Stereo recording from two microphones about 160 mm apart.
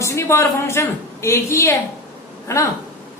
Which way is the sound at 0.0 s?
15° left (ahead or behind).